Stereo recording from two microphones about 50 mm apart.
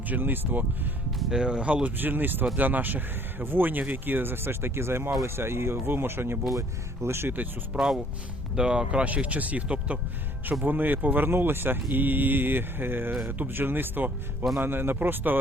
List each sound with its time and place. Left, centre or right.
0.1 s speech: right
1.3 s speech: centre; by 6.4 s right
6.6 s speech: right
7.7 s speech: centre
10.6 s speech: right